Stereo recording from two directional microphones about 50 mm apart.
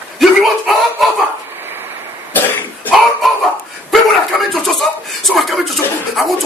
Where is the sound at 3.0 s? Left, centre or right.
Centre.